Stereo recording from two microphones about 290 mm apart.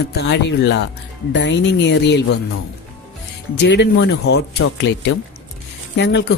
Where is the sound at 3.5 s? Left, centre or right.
Left.